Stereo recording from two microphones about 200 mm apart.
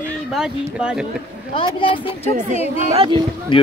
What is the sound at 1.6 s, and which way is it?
Speech, 25° left (ahead or behind).